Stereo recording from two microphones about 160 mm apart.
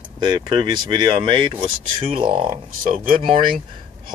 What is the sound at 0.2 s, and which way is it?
Speech, 30° right (ahead or behind).